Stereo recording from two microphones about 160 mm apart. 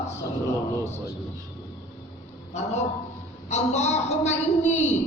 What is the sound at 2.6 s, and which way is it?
A woman's voice, 45° left (ahead or behind).